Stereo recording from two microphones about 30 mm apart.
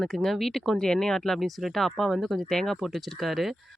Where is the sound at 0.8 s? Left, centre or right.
Centre.